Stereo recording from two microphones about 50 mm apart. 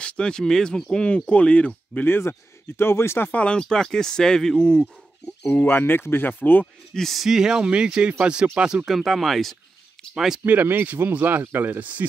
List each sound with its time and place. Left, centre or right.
0.0 s speech: centre
1.0 s speech: left
2.0 s speech: left
3.3 s speech: left
5.5 s speech: left
6.9 s speech: centre
7.2 s speech: centre
8.8 s speech: centre
10.1 s speech: centre
10.4 s speech: right